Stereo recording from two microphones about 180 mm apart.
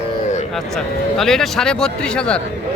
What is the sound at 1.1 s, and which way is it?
Speech, centre (ahead or behind).